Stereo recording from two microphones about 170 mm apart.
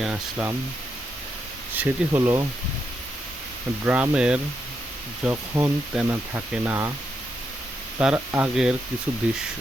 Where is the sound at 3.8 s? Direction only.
10° right (ahead or behind).